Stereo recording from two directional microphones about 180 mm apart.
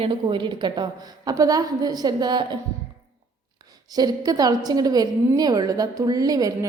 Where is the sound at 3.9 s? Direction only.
20° right (ahead or behind).